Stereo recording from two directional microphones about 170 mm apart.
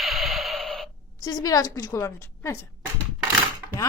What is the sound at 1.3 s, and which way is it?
A woman's voice, 20° left (ahead or behind).